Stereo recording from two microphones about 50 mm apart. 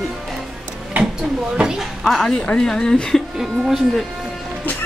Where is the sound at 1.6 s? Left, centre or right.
Centre.